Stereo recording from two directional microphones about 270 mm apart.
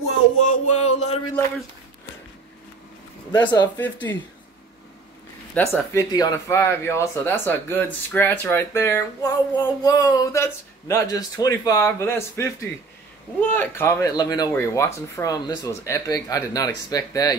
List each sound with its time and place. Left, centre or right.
0.4 s music: left
3.3 s speech: centre
5.5 s speech: centre